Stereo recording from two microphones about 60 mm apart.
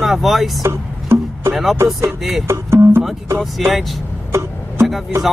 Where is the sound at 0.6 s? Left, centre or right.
Right.